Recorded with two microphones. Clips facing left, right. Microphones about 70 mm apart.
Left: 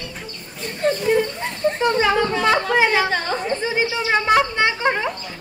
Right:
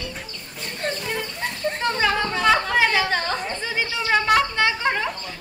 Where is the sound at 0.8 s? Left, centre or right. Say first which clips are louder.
Left 8 dB; centre.